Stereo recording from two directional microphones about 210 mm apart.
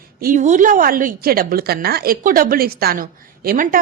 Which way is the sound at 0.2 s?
40° right (ahead or behind).